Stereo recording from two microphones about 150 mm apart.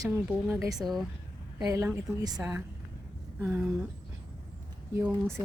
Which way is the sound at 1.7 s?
20° right (ahead or behind).